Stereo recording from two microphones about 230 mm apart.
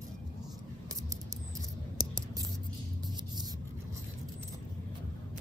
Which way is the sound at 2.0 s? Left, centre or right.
Centre.